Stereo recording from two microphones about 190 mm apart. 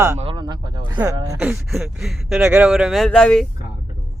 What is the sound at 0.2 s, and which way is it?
Speech, 25° right (ahead or behind).